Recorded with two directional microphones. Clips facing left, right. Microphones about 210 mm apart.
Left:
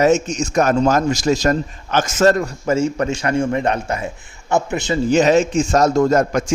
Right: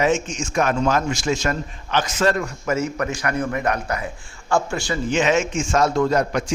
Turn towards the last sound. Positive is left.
turn(degrees=45)  # may be behind; listen again after turning